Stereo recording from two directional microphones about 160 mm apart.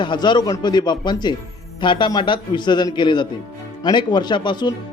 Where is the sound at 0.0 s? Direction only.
30° left (ahead or behind).